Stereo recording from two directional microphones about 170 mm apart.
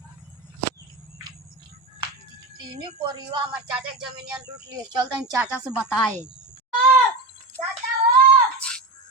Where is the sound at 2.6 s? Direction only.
30° right (ahead or behind).